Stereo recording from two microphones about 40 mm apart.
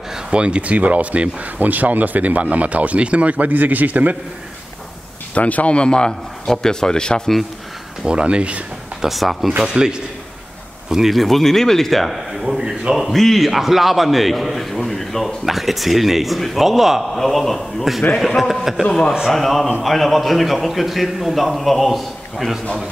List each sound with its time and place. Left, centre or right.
0.3 s speech: right
0.7 s speech: right
5.3 s speech: left
5.8 s a man's voice: left
8.1 s speech: right
9.0 s a man's voice: centre
9.6 s speech: centre
11.1 s a man's voice: centre
12.4 s speech: centre
13.1 s a man's voice: centre
17.1 s a man's voice: centre